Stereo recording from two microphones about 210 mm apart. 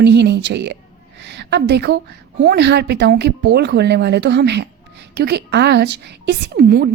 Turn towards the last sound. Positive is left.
turn(degrees=-45)  # may be behind; listen again after turning